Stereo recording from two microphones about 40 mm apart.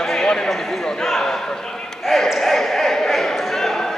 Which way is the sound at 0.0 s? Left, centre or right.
Centre.